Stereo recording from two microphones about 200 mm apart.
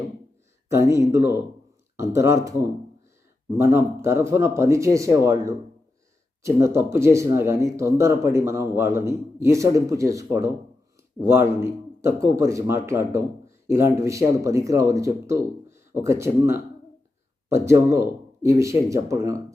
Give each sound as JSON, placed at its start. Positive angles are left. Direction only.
{"t": 0.7, "sound": "speech", "side_deg": -15}